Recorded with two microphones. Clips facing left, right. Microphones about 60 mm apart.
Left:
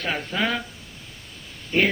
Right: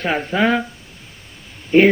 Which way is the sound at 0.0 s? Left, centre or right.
Right.